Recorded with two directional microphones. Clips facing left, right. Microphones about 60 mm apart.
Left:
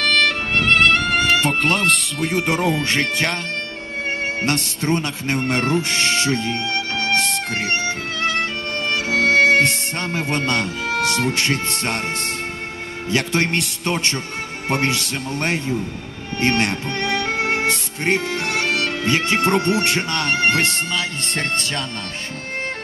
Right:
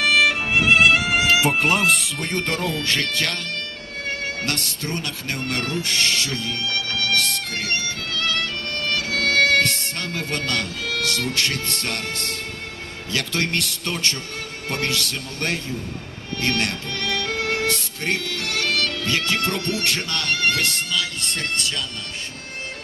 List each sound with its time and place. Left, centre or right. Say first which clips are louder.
0.0 s music: even; centre; by 3.3 s left
4.4 s speech: left 5 dB; left